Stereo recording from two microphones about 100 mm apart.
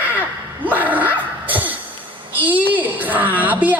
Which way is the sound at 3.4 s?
15° right (ahead or behind).